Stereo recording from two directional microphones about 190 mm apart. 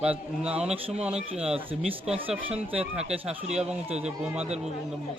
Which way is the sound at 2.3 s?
5° right (ahead or behind).